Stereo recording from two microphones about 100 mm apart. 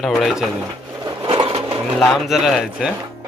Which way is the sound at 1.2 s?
55° right (ahead or behind).